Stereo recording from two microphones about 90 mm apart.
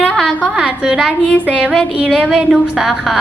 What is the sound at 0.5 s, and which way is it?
A woman's voice, 10° right (ahead or behind).